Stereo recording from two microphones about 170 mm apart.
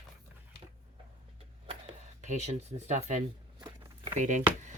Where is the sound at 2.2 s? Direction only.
45° right (ahead or behind).